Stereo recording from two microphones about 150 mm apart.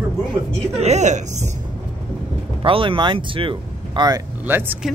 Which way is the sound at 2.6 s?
35° right (ahead or behind).